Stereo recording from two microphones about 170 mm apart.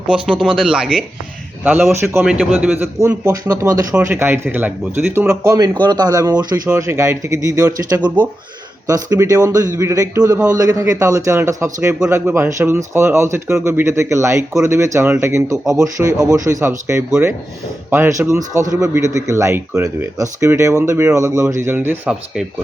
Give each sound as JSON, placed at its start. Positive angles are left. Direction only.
{"t": 0.1, "sound": "speech", "side_deg": -5}
{"t": 5.3, "sound": "a man's voice", "side_deg": -20}